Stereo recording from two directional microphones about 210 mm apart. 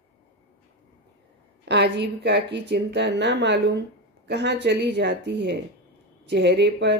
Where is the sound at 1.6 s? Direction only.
55° right (ahead or behind).